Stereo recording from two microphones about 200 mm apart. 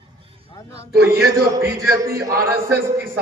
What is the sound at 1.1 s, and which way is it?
Speech, 50° right (ahead or behind).